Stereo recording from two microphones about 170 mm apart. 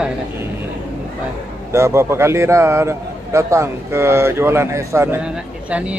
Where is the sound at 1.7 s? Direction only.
15° right (ahead or behind).